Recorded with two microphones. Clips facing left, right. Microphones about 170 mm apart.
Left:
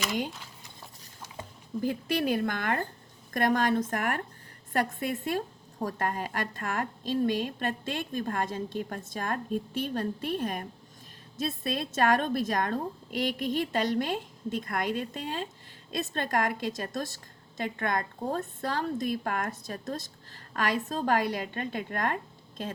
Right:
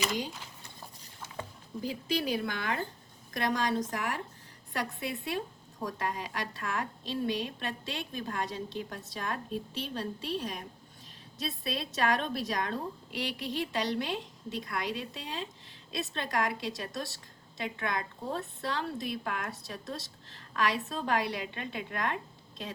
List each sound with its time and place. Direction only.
1.8 s a woman's voice: 55° left (ahead or behind)